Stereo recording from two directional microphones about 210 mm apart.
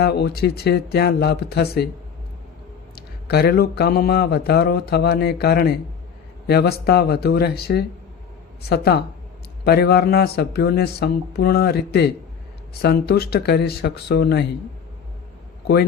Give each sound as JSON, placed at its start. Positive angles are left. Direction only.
{"t": 0.0, "sound": "speech", "side_deg": 50}
{"t": 2.9, "sound": "speech", "side_deg": 50}